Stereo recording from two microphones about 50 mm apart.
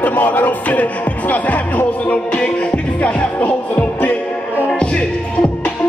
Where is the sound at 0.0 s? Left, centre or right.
Left.